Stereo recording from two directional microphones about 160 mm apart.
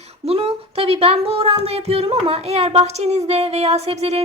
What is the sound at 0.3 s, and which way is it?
Speech, 35° right (ahead or behind).